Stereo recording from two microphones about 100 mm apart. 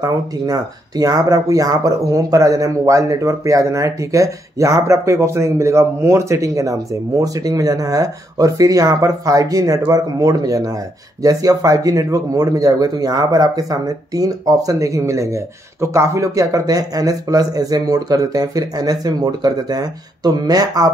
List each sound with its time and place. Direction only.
0.0 s speech: 40° right (ahead or behind)